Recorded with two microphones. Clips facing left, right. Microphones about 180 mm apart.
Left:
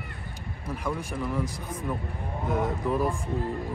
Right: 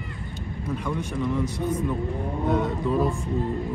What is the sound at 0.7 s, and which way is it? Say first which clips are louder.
A man's voice: right 2 dB; 5° left (ahead or behind).